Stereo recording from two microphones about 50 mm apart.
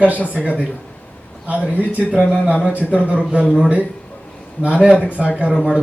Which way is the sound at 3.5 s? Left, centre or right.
Right.